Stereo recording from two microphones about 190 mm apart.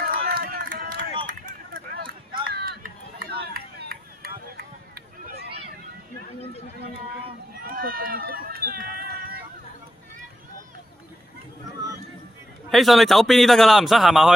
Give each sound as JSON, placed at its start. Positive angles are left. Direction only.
{"t": 0.0, "sound": "run", "side_deg": -50}
{"t": 1.3, "sound": "a sound", "side_deg": -45}
{"t": 3.3, "sound": "run", "side_deg": -55}
{"t": 4.5, "sound": "a sound", "side_deg": -55}
{"t": 7.5, "sound": "run", "side_deg": -50}
{"t": 12.7, "sound": "a man's voice", "side_deg": 0}